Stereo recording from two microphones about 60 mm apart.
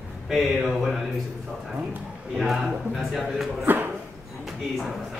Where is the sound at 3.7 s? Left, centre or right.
Right.